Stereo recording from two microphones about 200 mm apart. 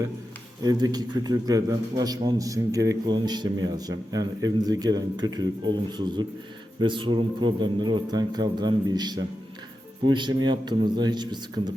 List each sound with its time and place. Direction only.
0.6 s a man's voice: 20° right (ahead or behind)